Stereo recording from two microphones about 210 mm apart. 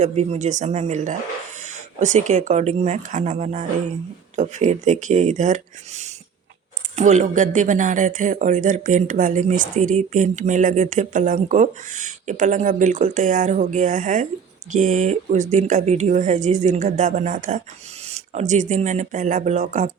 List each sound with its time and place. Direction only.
0.0 s speech: 30° right (ahead or behind)